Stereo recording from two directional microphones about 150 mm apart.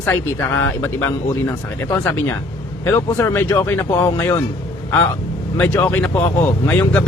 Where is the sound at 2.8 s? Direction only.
15° left (ahead or behind).